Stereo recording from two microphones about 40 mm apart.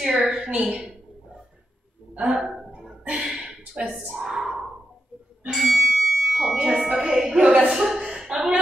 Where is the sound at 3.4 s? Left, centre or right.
Right.